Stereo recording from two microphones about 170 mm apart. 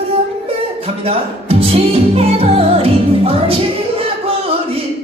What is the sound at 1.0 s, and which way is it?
Music, 35° right (ahead or behind).